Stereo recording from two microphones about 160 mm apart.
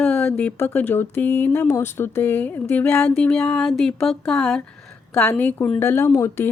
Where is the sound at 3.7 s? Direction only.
Centre (ahead or behind).